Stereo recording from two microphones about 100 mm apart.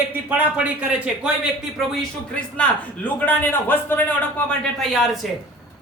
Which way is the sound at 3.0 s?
15° left (ahead or behind).